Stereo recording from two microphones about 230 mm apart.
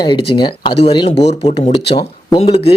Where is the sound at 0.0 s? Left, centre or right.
Centre.